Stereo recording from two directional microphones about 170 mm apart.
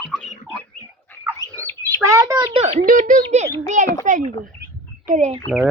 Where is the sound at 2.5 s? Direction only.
40° right (ahead or behind).